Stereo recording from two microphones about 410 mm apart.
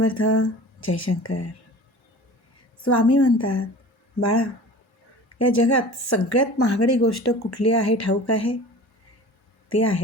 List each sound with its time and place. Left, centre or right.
0.1 s speech: left
2.8 s speech: left
9.6 s speech: left